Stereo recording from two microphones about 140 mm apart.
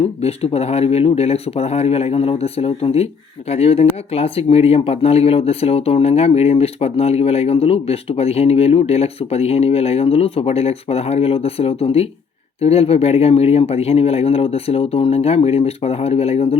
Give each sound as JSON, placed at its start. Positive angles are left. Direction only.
{"t": 0.0, "sound": "speech", "side_deg": 45}